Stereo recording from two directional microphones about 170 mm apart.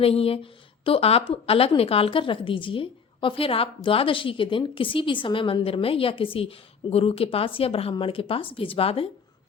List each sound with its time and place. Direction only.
0.0 s a woman's voice: 35° left (ahead or behind)